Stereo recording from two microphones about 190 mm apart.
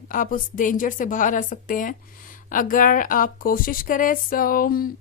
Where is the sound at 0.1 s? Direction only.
45° left (ahead or behind).